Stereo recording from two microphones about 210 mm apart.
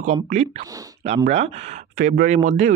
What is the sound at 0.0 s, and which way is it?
Speech, 35° right (ahead or behind).